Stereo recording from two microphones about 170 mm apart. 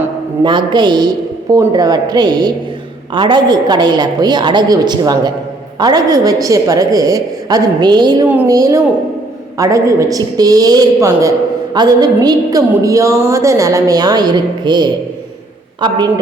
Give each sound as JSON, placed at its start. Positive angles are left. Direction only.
{"t": 0.4, "sound": "a woman's voice", "side_deg": -25}